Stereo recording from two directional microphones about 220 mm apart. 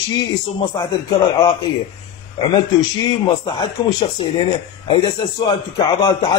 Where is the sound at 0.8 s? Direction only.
20° left (ahead or behind).